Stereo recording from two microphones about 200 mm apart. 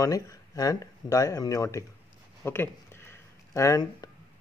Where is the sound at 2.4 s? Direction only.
10° left (ahead or behind).